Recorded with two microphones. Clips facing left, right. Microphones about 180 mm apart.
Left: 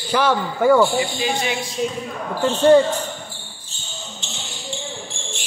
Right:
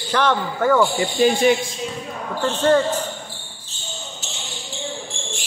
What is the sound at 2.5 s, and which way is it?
Speech, 10° left (ahead or behind).